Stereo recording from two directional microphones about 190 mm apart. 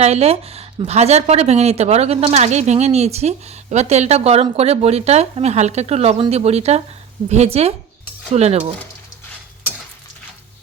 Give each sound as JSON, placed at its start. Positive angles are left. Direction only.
{"t": 0.0, "sound": "speech", "side_deg": -35}